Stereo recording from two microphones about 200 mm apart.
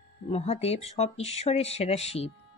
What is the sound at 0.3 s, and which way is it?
Speech, 30° left (ahead or behind).